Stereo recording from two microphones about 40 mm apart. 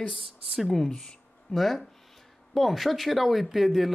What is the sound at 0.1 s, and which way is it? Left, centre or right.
Speech, centre.